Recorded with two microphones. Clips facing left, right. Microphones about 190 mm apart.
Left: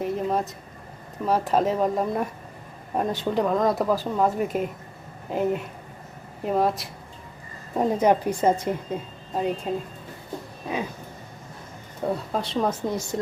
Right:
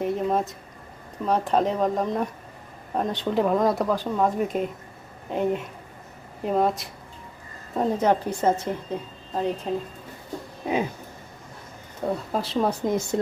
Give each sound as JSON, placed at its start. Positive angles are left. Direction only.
{"t": 0.0, "sound": "speech", "side_deg": 0}
{"t": 12.0, "sound": "speech", "side_deg": -5}
{"t": 12.8, "sound": "a woman's voice", "side_deg": -20}